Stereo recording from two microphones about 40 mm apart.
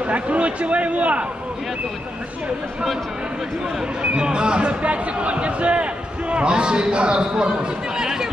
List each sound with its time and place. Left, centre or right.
0.0 s speech: right
4.0 s a man's voice: right
8.0 s a sound: centre